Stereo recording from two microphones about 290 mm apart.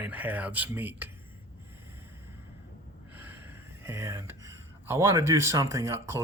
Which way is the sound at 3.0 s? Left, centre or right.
Centre.